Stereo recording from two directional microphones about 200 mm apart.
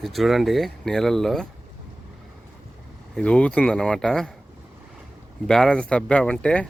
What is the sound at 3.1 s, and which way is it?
Speech, 5° left (ahead or behind).